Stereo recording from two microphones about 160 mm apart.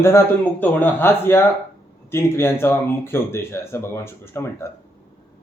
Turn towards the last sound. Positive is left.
turn(degrees=15)  # may be behind; listen again after turning